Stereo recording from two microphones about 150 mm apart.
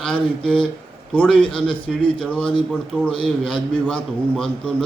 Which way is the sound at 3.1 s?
35° left (ahead or behind).